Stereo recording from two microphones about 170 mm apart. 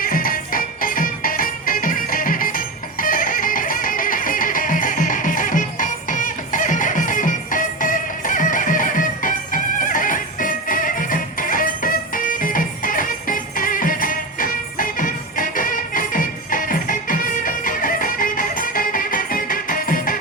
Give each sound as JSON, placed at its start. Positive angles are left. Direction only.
{"t": 0.0, "sound": "music", "side_deg": 55}